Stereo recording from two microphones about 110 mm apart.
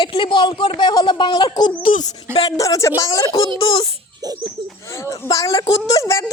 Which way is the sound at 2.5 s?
30° left (ahead or behind).